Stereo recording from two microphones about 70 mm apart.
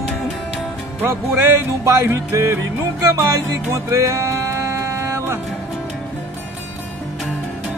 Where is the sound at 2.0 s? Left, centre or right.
Right.